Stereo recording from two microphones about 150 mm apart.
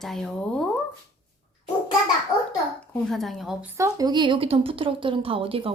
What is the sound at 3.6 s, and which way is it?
A woman's voice, 20° right (ahead or behind).